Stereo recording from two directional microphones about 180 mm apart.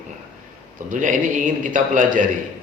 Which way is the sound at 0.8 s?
45° right (ahead or behind).